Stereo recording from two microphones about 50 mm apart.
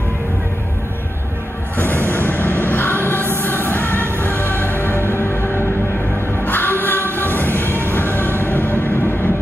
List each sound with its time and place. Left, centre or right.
1.8 s music: left
7.9 s train: left